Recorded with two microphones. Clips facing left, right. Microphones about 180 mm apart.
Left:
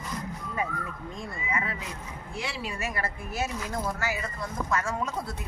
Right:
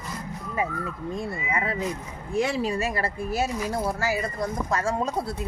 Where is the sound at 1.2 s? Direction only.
30° right (ahead or behind).